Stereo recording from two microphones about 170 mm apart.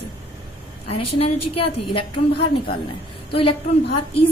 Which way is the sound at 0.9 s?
35° left (ahead or behind).